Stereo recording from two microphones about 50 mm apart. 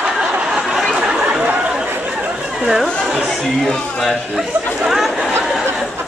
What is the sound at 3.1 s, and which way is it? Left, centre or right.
Speech, centre.